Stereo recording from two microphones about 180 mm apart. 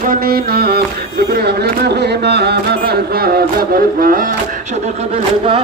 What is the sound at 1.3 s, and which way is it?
Speech, 65° right (ahead or behind).